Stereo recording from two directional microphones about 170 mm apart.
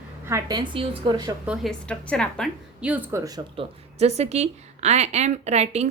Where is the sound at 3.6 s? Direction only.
40° right (ahead or behind).